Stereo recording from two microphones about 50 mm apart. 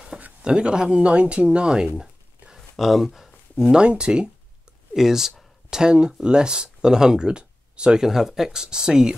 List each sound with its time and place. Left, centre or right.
0.4 s speech: centre
2.8 s speech: centre
3.7 s speech: centre
4.9 s speech: centre
5.9 s speech: centre